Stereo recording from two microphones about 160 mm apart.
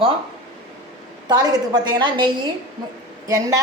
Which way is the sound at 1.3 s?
25° right (ahead or behind).